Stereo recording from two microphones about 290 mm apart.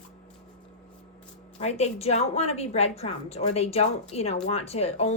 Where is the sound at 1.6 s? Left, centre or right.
Left.